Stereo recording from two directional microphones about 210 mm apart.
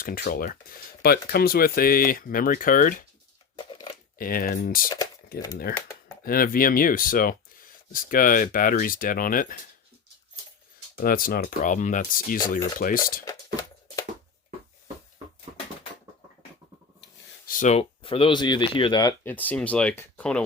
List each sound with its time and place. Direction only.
0.0 s speech: 45° left (ahead or behind)
3.5 s crushing: 20° left (ahead or behind)
4.2 s speech: 45° left (ahead or behind)
10.9 s speech: 45° left (ahead or behind)
13.2 s a sound: 15° left (ahead or behind)
17.0 s speech: 45° left (ahead or behind); by 20.4 s 5° left (ahead or behind)